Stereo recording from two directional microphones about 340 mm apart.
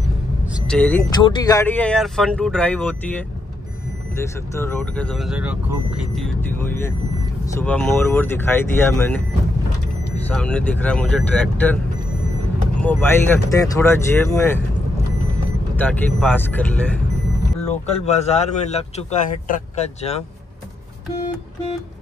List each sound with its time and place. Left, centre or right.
0.7 s speech: centre
4.2 s speech: centre
10.2 s speech: centre
12.8 s speech: centre
15.8 s speech: centre
17.6 s speech: centre